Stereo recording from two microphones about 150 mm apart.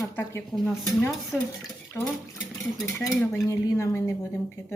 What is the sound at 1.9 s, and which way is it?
A woman's voice, 20° left (ahead or behind).